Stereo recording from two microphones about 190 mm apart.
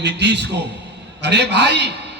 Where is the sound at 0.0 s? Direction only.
65° right (ahead or behind).